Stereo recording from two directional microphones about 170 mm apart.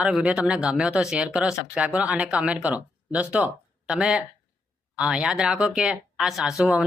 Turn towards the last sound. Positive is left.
turn(degrees=-5)  # may be behind; listen again after turning